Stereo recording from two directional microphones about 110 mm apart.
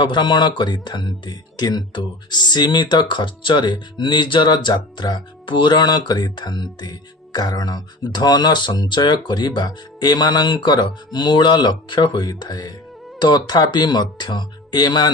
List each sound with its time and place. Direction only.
0.0 s speech: 45° left (ahead or behind)